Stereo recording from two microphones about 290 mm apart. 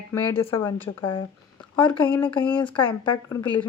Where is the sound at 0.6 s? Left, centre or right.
Centre.